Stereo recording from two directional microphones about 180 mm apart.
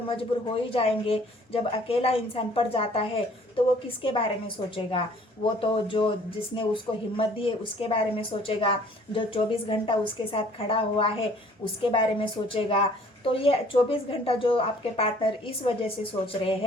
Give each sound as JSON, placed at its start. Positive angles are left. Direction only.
{"t": 0.7, "sound": "a woman's voice", "side_deg": 30}